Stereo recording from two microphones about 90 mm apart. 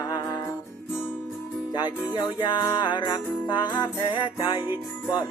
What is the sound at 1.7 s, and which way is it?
Music, 50° left (ahead or behind).